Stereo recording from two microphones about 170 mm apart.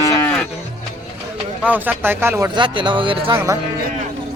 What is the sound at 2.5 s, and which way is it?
Speech, 30° right (ahead or behind).